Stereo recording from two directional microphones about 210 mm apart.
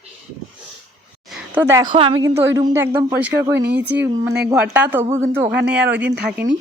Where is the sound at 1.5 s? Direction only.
10° right (ahead or behind).